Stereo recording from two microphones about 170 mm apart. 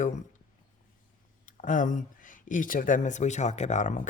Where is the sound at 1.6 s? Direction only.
50° left (ahead or behind).